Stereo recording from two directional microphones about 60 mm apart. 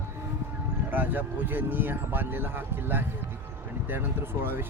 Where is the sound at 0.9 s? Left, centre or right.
Right.